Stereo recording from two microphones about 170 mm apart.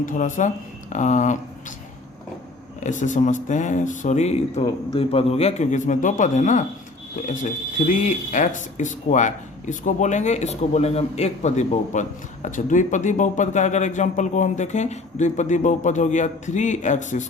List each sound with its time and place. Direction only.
0.0 s speech: 50° left (ahead or behind)
2.8 s speech: 45° left (ahead or behind)